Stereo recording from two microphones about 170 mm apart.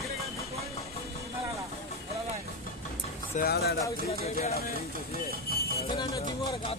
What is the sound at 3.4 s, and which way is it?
Speech, 65° left (ahead or behind).